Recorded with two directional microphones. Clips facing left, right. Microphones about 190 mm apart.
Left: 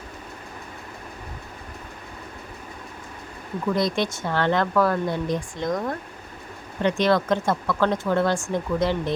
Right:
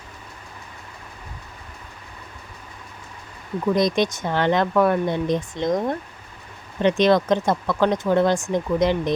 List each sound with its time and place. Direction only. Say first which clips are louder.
3.8 s speech: right 4 dB; 20° right (ahead or behind)